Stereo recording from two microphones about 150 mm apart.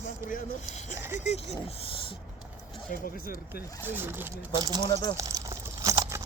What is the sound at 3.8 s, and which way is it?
Speech, 15° right (ahead or behind).